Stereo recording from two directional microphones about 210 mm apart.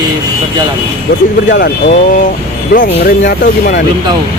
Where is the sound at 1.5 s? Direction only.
55° left (ahead or behind).